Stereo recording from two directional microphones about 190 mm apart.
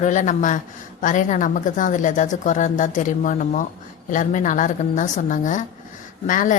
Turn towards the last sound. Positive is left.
turn(degrees=45)  # may be behind; listen again after turning